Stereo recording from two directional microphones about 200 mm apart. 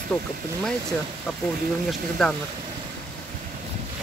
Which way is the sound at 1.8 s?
Centre (ahead or behind).